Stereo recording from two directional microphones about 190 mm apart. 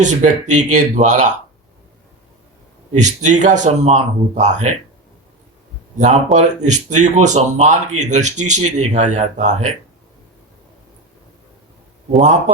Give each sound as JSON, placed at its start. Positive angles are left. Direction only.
{"t": 0.0, "sound": "speech", "side_deg": -40}
{"t": 3.0, "sound": "speech", "side_deg": -40}
{"t": 6.3, "sound": "speech", "side_deg": -40}
{"t": 12.1, "sound": "speech", "side_deg": -40}